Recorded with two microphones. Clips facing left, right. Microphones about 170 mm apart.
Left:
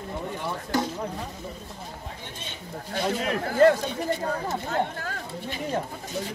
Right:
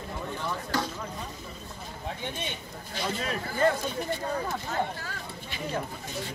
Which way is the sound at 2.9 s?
60° left (ahead or behind).